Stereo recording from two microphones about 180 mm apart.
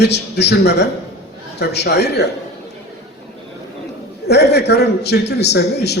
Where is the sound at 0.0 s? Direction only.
65° left (ahead or behind).